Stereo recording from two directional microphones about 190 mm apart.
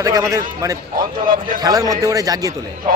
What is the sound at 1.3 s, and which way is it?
Speech, 45° right (ahead or behind).